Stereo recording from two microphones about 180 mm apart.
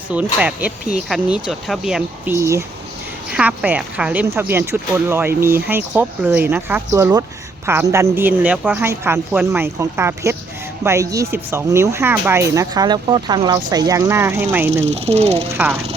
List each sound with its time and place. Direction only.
0.1 s speech: 5° right (ahead or behind)
2.3 s speech: 15° right (ahead or behind)
14.7 s speech: 40° right (ahead or behind)